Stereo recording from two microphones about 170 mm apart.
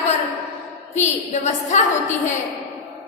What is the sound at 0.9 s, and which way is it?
A woman's voice, 45° left (ahead or behind).